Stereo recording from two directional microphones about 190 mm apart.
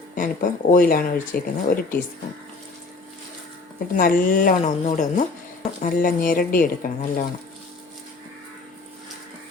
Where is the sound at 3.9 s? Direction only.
45° left (ahead or behind).